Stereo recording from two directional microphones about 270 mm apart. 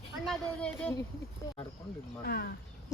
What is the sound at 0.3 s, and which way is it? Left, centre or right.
Speech, centre.